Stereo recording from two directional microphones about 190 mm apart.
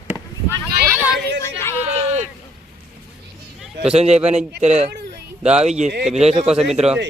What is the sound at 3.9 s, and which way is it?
Speech, 35° right (ahead or behind).